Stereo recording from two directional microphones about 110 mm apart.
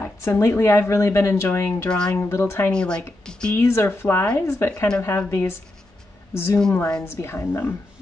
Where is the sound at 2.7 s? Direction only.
10° left (ahead or behind).